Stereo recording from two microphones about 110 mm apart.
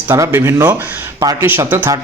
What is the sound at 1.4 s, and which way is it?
Speech, 20° right (ahead or behind).